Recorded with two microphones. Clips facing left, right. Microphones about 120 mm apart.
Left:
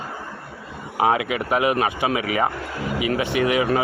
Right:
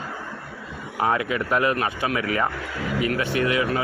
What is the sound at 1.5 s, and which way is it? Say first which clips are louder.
Speech: left 3 dB; 15° left (ahead or behind).